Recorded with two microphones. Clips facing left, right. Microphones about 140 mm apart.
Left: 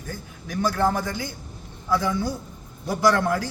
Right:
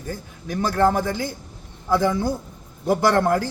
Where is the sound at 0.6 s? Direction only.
45° right (ahead or behind).